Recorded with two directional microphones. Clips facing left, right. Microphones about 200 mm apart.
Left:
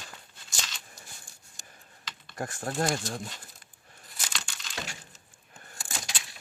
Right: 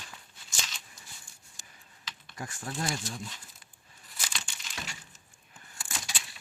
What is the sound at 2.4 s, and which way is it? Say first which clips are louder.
Speech: left 6 dB; 45° left (ahead or behind).